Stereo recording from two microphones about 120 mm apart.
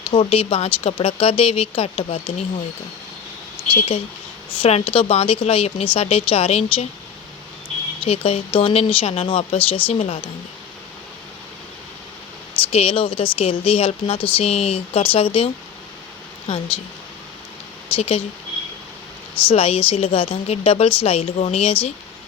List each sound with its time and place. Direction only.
0.1 s speech: 50° left (ahead or behind)
3.7 s speech: 50° left (ahead or behind)
8.0 s speech: 55° left (ahead or behind)
12.7 s speech: 50° left (ahead or behind)
16.5 s speech: 50° left (ahead or behind)
17.9 s speech: 55° left (ahead or behind)
19.5 s speech: 55° left (ahead or behind)